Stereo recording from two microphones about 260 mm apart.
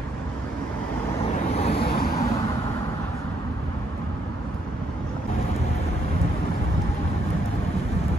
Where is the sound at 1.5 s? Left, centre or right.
Left.